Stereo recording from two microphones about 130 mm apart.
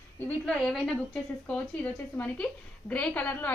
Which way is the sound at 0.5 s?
5° left (ahead or behind).